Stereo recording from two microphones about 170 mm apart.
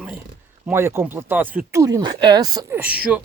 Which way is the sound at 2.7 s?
10° right (ahead or behind).